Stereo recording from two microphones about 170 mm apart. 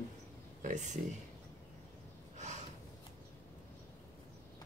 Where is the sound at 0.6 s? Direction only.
45° right (ahead or behind).